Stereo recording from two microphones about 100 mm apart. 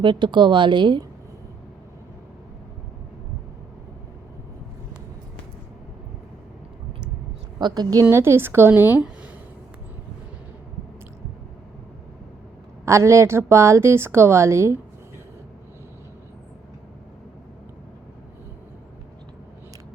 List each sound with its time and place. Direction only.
0.0 s speech: 55° right (ahead or behind)
7.6 s a woman's voice: 40° right (ahead or behind)
8.1 s a woman's voice: 25° right (ahead or behind)
12.8 s a woman's voice: 30° right (ahead or behind)